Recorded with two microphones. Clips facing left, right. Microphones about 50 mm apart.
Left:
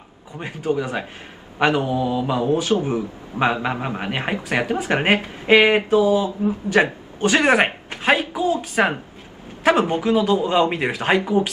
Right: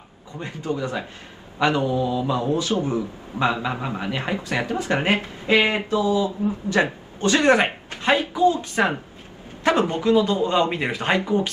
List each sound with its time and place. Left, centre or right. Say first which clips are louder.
0.4 s a man's voice: left 4 dB; left
1.9 s mantra: left 1 dB; left
2.2 s a man's voice: left 3 dB; left; by 11.5 s centre